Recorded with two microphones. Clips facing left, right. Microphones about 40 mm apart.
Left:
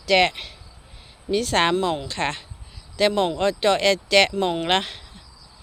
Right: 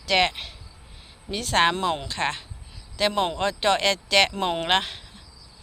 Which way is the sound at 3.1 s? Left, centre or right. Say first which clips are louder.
Left 3 dB; centre.